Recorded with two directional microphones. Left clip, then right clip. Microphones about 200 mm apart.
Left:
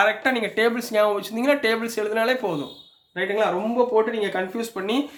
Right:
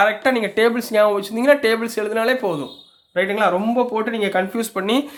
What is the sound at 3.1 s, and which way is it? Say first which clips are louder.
Speech: right 5 dB; 45° right (ahead or behind).